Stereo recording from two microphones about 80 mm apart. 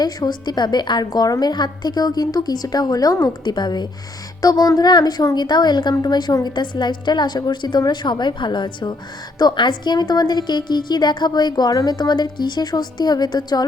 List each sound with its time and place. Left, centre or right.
0.0 s a woman's voice: left
3.4 s a woman's voice: left